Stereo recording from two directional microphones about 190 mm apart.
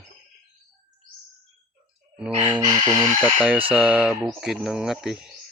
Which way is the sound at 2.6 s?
20° right (ahead or behind).